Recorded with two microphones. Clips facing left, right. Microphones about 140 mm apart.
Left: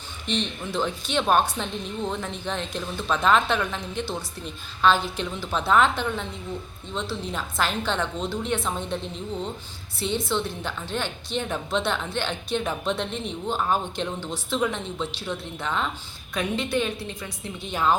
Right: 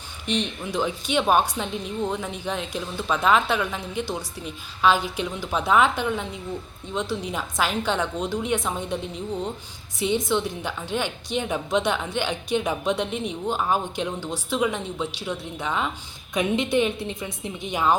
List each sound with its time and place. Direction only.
0.3 s a woman's voice: 10° right (ahead or behind)
10.0 s a woman's voice: 15° right (ahead or behind)